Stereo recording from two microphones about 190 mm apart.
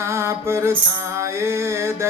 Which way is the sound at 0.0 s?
15° right (ahead or behind).